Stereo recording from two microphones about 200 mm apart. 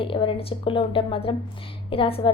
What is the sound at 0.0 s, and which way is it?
A woman's voice, 25° left (ahead or behind).